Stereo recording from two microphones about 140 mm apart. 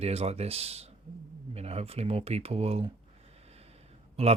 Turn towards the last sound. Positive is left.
turn(degrees=-50)  # may be behind; listen again after turning